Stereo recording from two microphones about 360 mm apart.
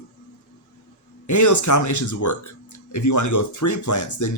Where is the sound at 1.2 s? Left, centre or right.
Left.